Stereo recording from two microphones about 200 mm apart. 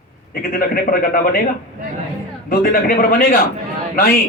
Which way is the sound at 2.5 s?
45° left (ahead or behind).